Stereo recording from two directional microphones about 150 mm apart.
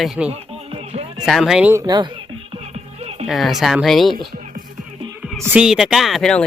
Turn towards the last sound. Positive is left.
turn(degrees=0)  # may be behind; listen again after turning